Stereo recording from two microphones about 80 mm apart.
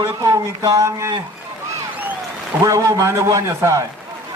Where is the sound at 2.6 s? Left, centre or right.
Right.